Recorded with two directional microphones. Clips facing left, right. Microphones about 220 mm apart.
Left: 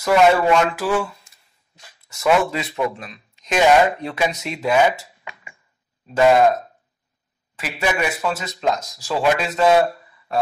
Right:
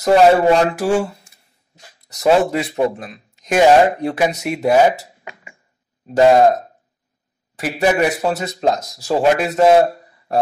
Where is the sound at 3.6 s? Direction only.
30° right (ahead or behind).